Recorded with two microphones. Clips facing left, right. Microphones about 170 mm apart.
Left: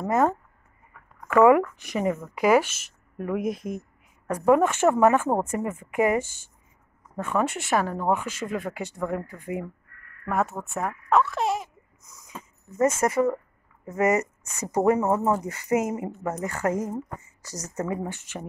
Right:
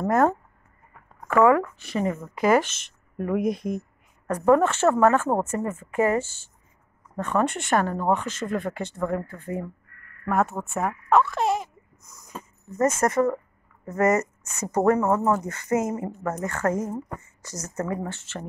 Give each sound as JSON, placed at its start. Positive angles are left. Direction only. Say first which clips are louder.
{"t": 0.0, "sound": "speech", "louder": "right 2 dB", "side_deg": 0}
{"t": 1.2, "sound": "speech", "louder": "left 1 dB", "side_deg": 15}
{"t": 10.2, "sound": "speech", "louder": "right 2 dB", "side_deg": 0}
{"t": 11.1, "sound": "a sound", "louder": "right 2 dB", "side_deg": 0}
{"t": 12.7, "sound": "speech", "louder": "even", "side_deg": 10}
{"t": 17.4, "sound": "a woman's voice", "louder": "right 1 dB", "side_deg": 35}
{"t": 17.6, "sound": "speech", "louder": "even", "side_deg": 20}